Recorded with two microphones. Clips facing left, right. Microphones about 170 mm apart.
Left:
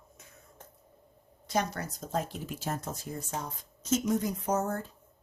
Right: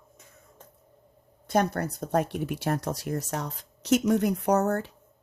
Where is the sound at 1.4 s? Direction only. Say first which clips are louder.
Right 6 dB; 55° right (ahead or behind).